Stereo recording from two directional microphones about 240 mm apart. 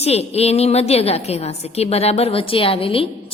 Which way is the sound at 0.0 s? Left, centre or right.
Left.